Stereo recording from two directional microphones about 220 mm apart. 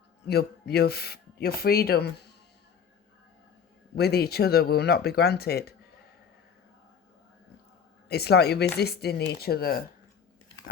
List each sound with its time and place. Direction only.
0.3 s speech: 45° left (ahead or behind)
3.9 s speech: 45° left (ahead or behind)
8.0 s speech: 45° left (ahead or behind)